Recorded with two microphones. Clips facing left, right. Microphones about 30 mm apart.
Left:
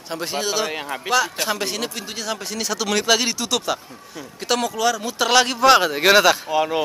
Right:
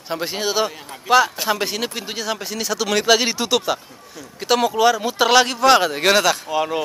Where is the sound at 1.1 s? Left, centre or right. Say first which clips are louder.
Right 5 dB; left.